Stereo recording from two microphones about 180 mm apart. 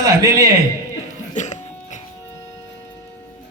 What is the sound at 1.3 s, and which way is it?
Music, 40° left (ahead or behind).